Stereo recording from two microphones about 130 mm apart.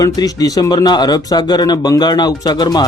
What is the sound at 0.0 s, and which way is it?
Speech, 30° left (ahead or behind).